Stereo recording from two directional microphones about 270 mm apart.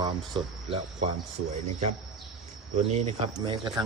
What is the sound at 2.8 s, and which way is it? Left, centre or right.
Speech, right.